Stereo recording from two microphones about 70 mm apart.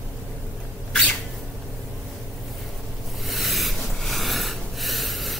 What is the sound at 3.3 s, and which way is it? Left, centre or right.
Snort, centre.